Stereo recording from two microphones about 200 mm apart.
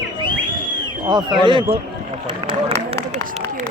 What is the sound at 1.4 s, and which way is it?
Speech, 25° right (ahead or behind).